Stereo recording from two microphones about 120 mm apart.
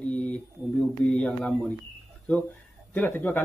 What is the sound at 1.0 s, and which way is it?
Speech, 5° left (ahead or behind).